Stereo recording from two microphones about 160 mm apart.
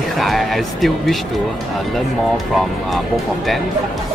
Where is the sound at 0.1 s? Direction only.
Centre (ahead or behind).